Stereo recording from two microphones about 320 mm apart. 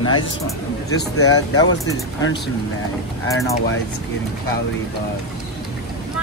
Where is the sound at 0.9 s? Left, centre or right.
Left.